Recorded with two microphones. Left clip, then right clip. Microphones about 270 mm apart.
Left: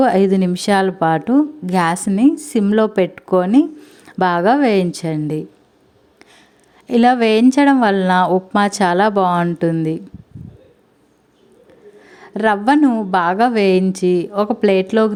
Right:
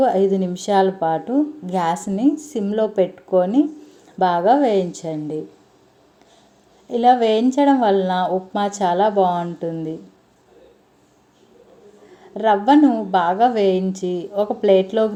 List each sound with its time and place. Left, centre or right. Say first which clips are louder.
0.0 s a woman's voice: left 3 dB; left
6.8 s a woman's voice: left 1 dB; left
12.0 s a woman's voice: left 1 dB; left